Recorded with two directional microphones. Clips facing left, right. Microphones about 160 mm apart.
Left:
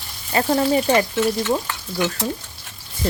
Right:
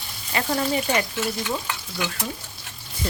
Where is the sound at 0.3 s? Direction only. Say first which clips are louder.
Left 6 dB; 40° left (ahead or behind).